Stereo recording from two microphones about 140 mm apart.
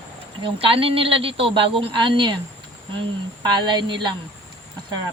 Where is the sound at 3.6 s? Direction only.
35° right (ahead or behind).